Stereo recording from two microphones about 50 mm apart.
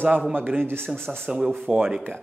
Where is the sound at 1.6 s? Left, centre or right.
Right.